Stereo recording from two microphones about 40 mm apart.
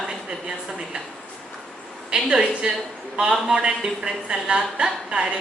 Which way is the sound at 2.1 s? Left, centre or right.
Centre.